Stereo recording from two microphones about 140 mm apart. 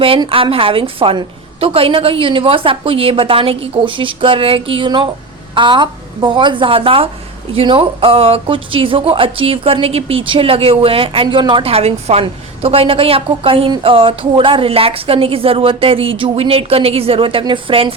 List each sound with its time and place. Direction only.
0.0 s speech: 40° right (ahead or behind)